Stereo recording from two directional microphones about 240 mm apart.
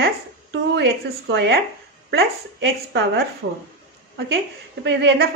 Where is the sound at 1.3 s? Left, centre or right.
Right.